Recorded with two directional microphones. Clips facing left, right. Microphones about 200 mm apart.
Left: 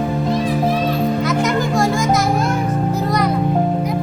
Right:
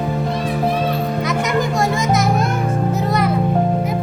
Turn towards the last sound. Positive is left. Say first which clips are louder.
# even
turn(degrees=0)  # may be behind; listen again after turning